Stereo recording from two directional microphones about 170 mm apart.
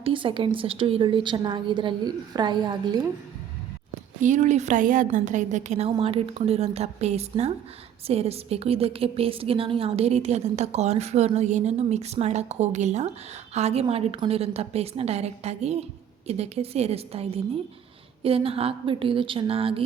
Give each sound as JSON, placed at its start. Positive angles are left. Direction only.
{"t": 0.0, "sound": "a woman's voice", "side_deg": -30}
{"t": 4.2, "sound": "a woman's voice", "side_deg": -45}